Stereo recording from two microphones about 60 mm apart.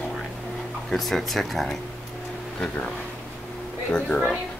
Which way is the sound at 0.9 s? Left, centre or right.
Centre.